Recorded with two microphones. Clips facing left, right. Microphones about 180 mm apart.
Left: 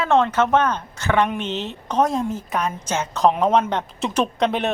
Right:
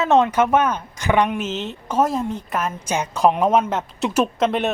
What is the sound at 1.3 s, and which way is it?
Speech, centre (ahead or behind).